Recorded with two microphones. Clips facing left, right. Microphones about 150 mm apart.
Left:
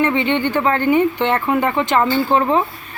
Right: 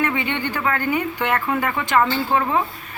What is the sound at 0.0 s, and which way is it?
Speech, 25° left (ahead or behind).